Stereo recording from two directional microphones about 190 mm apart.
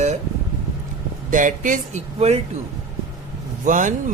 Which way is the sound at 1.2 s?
45° right (ahead or behind).